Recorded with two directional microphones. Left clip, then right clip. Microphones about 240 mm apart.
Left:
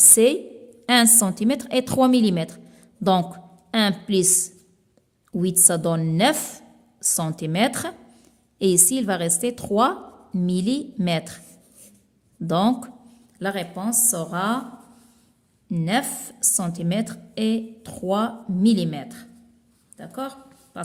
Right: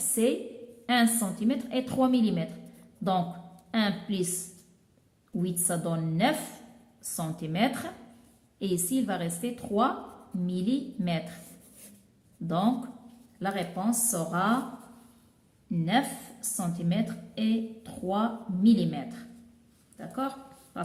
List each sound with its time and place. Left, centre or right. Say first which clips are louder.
0.2 s a woman's voice: left 9 dB; left
5.4 s a woman's voice: left 10 dB; left
12.5 s a woman's voice: left 7 dB; left
15.7 s a woman's voice: left 4 dB; left